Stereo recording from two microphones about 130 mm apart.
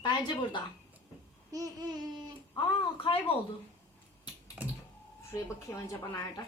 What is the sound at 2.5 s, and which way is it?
Speech, 45° left (ahead or behind).